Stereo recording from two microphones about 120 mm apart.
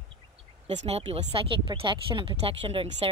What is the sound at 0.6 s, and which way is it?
A woman's voice, 65° right (ahead or behind).